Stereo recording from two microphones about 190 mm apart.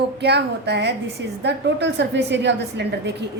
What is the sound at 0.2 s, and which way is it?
A woman's voice, 60° right (ahead or behind).